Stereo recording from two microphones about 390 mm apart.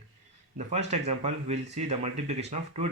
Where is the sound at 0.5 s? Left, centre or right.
Centre.